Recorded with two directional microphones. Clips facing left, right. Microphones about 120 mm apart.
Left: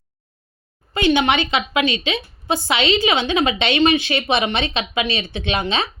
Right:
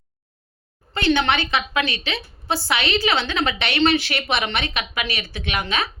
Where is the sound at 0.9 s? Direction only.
15° left (ahead or behind).